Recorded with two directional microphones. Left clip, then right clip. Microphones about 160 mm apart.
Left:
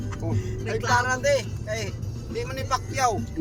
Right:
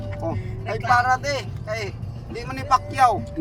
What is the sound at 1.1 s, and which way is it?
Speech, 10° right (ahead or behind).